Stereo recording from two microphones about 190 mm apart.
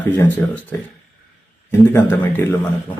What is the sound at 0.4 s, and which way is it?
Speech, 10° left (ahead or behind).